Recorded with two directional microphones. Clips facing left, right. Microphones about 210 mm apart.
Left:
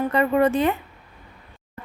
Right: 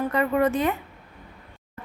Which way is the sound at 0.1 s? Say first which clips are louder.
Left 4 dB; 30° left (ahead or behind).